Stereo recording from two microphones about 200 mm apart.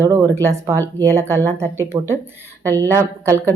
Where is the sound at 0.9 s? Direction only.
15° right (ahead or behind).